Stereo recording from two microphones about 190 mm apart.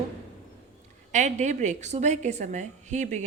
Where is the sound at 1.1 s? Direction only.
40° right (ahead or behind).